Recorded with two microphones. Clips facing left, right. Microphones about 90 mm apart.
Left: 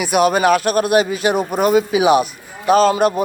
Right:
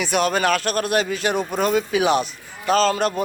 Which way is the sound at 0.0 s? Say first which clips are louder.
Left 5 dB; 10° left (ahead or behind).